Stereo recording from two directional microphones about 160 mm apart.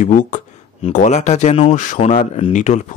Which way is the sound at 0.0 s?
50° left (ahead or behind).